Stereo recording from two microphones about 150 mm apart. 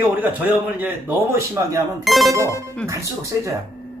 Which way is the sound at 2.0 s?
Centre (ahead or behind).